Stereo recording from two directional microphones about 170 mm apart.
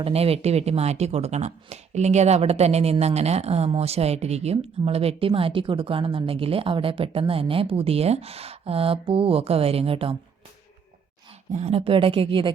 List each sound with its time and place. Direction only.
0.0 s speech: 35° right (ahead or behind)
11.5 s speech: 35° right (ahead or behind)